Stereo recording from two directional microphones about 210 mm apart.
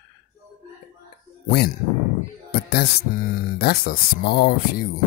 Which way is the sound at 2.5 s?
50° left (ahead or behind).